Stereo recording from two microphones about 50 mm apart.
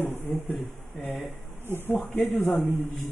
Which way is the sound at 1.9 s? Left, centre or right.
Left.